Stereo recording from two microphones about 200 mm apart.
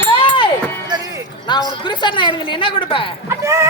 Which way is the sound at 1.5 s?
20° left (ahead or behind).